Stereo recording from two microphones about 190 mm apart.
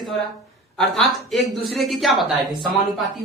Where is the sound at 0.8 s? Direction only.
Centre (ahead or behind).